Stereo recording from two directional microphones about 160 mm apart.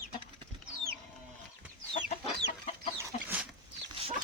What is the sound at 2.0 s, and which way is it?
Chicken, 55° left (ahead or behind).